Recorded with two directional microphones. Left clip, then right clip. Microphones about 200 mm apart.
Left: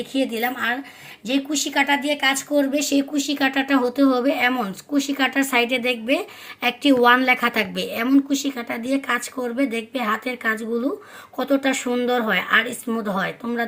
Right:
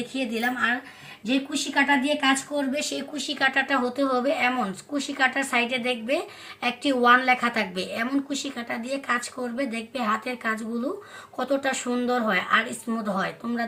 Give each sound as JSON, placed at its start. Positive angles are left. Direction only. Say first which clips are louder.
{"t": 0.1, "sound": "speech", "louder": "left 5 dB", "side_deg": 45}